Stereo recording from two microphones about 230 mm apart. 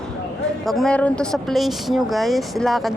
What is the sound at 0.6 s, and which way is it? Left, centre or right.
Speech, centre.